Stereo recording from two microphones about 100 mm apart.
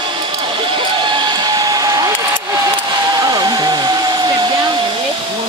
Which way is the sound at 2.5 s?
35° right (ahead or behind).